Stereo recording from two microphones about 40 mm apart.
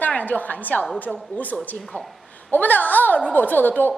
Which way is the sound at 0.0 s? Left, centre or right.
Left.